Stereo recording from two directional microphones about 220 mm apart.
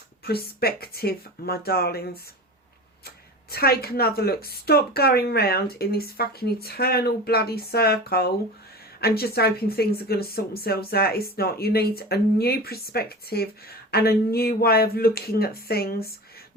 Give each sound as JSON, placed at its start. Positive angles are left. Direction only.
{"t": 0.3, "sound": "speech", "side_deg": 45}
{"t": 3.5, "sound": "speech", "side_deg": 45}